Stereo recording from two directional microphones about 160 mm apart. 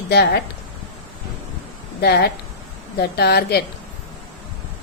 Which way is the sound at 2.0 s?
80° left.